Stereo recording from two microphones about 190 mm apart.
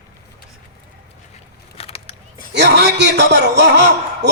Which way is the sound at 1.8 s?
30° left (ahead or behind).